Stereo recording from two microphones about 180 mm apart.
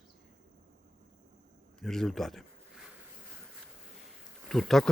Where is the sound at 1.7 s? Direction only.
Centre (ahead or behind).